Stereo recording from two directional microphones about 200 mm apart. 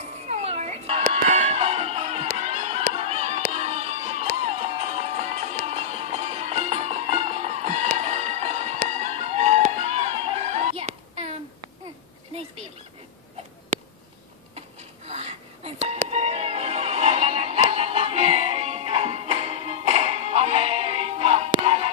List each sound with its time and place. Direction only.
0.3 s music: 30° right (ahead or behind)
1.1 s a sound: 35° right (ahead or behind)
2.9 s music: 30° right (ahead or behind)
8.8 s a sound: 35° right (ahead or behind)
15.0 s whispering: 30° right (ahead or behind)
16.1 s music: 30° right (ahead or behind)